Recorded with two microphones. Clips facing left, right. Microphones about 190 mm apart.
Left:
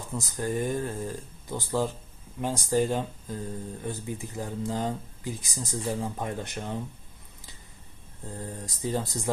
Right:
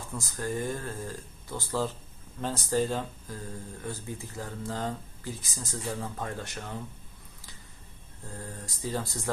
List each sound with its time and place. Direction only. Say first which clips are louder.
0.1 s speech: left 3 dB; 15° left (ahead or behind)
8.3 s speech: left 4 dB; 20° left (ahead or behind)